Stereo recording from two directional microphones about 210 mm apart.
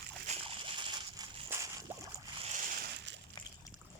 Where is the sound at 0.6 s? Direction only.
20° right (ahead or behind).